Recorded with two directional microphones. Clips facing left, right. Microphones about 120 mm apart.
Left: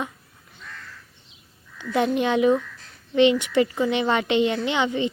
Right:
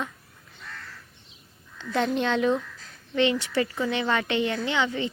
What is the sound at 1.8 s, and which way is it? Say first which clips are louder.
Speech: left 3 dB; 10° left (ahead or behind).